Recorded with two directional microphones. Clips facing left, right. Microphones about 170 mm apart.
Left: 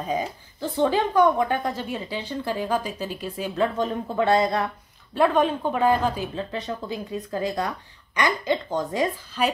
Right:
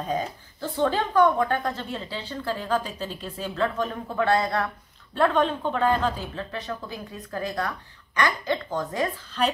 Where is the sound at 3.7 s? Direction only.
25° left (ahead or behind).